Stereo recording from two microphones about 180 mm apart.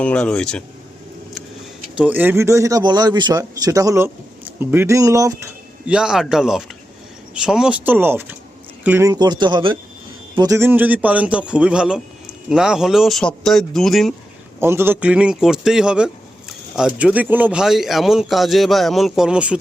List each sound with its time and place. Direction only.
0.0 s a man's voice: 5° left (ahead or behind)
2.0 s a man's voice: 10° right (ahead or behind)
5.8 s a man's voice: 5° right (ahead or behind)
14.6 s a man's voice: 15° right (ahead or behind)